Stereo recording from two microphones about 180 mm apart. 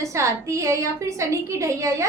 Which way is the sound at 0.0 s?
15° right (ahead or behind).